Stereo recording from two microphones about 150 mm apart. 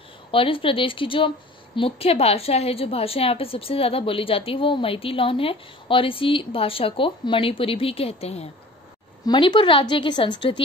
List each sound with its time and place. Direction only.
0.3 s a woman's voice: 35° left (ahead or behind)
9.2 s a woman's voice: 30° left (ahead or behind)